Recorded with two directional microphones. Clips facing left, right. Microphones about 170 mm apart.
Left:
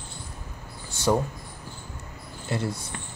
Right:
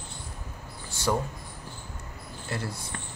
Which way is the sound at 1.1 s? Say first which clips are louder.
Left 4 dB; 25° left (ahead or behind).